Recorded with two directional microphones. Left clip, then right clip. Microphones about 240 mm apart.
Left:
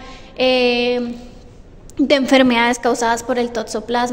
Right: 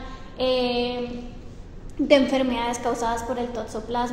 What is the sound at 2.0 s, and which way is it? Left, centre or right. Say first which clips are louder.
A woman's voice: left 6 dB; left.